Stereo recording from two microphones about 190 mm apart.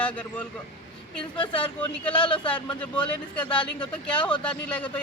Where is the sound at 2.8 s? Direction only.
5° left (ahead or behind).